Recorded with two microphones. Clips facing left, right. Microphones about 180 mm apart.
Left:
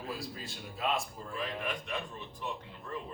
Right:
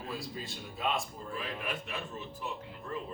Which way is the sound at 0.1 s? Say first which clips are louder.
Right 3 dB; centre (ahead or behind).